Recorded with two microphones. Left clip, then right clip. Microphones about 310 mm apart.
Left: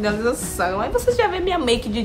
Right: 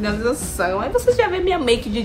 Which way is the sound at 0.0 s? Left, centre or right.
Centre.